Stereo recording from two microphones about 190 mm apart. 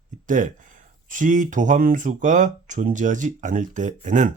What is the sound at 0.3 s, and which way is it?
Speech, 45° right (ahead or behind).